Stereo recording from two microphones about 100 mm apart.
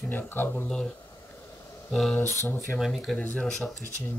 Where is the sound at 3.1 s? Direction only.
15° left (ahead or behind).